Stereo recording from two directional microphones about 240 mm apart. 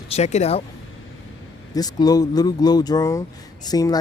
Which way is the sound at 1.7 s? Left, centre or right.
Centre.